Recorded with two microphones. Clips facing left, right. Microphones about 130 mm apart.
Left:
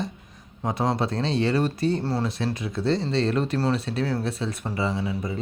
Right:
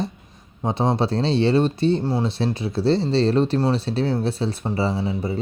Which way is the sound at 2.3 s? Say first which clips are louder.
Right 4 dB; 30° right (ahead or behind).